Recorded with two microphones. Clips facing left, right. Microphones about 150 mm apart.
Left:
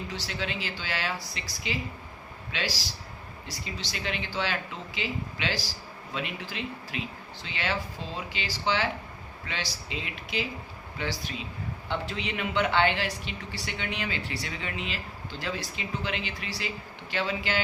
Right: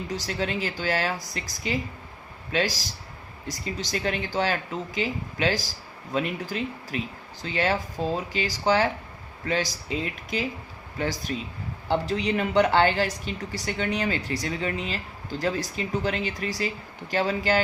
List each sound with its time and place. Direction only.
0.1 s speech: 45° right (ahead or behind)